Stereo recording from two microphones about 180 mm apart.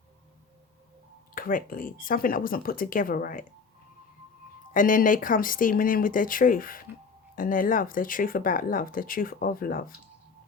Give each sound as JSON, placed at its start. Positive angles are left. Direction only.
{"t": 1.4, "sound": "speech", "side_deg": 50}
{"t": 4.7, "sound": "speech", "side_deg": 50}